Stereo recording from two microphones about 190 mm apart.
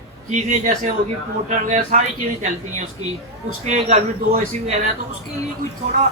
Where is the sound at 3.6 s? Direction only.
35° right (ahead or behind).